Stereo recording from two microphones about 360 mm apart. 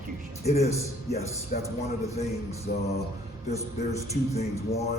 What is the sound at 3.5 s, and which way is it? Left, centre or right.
A man's voice, centre.